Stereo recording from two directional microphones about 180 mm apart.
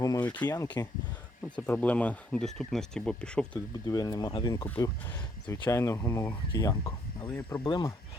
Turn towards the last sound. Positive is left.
turn(degrees=25)  # may be behind; listen again after turning